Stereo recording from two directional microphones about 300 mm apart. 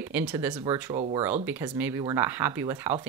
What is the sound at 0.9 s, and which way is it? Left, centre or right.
Speech, right.